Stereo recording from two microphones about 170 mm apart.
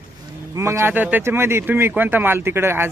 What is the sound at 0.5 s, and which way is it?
Speech, 15° right (ahead or behind).